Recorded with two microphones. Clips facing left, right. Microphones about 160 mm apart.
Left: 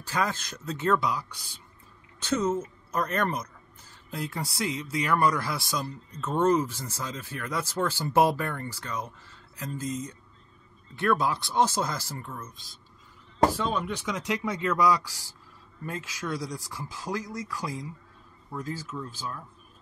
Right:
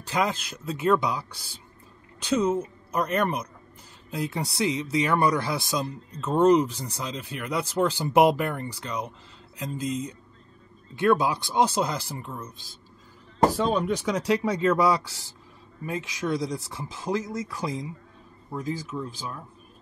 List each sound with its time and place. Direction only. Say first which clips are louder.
0.0 s speech: right 3 dB; 15° right (ahead or behind)
2.2 s speech: right 3 dB; 10° right (ahead or behind)
4.1 s speech: right 4 dB; 20° right (ahead or behind)
11.0 s speech: right 4 dB; 20° right (ahead or behind)
13.6 s speech: right 5 dB; 40° right (ahead or behind); by 19.4 s 15° right (ahead or behind)